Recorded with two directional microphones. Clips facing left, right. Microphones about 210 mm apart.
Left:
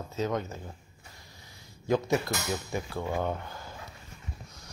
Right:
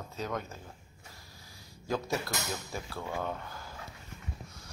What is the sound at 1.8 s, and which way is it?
Speech, 20° left (ahead or behind).